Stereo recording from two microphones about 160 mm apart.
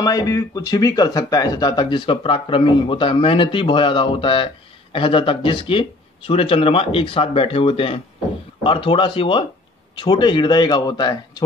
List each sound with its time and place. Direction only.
0.0 s speech: 25° left (ahead or behind)